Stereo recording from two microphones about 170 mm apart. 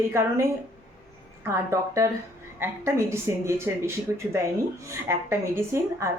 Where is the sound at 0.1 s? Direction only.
15° right (ahead or behind).